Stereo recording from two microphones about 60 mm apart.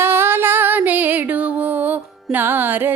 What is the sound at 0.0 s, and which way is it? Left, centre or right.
Music, right.